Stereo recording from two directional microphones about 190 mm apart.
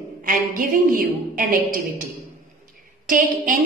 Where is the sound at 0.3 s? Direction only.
45° right (ahead or behind).